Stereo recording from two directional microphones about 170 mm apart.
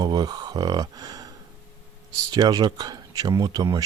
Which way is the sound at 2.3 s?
25° right (ahead or behind).